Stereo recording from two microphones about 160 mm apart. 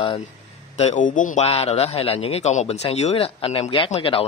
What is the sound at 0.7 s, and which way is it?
Speech, 45° left (ahead or behind).